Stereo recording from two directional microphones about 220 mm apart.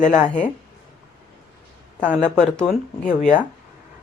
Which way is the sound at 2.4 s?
5° left (ahead or behind).